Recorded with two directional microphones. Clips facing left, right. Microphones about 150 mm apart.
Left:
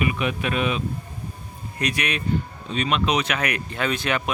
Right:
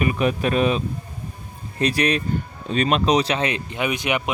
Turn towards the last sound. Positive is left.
turn(degrees=-15)  # may be behind; listen again after turning